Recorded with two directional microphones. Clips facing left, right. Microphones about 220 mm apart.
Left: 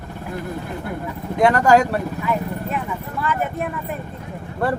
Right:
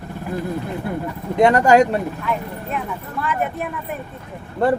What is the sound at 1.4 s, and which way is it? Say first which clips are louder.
Speech: right 2 dB; 20° right (ahead or behind).